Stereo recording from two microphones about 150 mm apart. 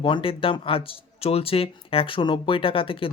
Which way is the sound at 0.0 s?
35° left (ahead or behind).